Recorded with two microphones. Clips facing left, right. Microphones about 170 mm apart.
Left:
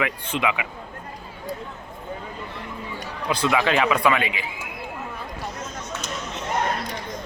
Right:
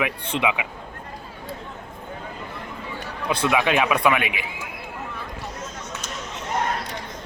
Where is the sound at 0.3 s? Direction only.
20° right (ahead or behind).